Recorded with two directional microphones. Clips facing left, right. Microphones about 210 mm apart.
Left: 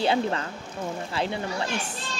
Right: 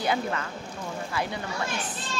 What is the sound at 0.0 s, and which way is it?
Speech, 30° left (ahead or behind).